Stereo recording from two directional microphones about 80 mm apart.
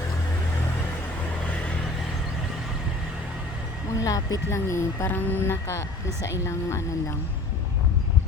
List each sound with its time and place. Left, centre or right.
3.9 s speech: left
4.5 s speech: left
5.0 s a sound: left
6.4 s speech: left